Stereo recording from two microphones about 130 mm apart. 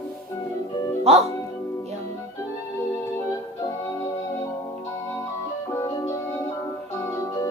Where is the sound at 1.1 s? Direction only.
50° right (ahead or behind).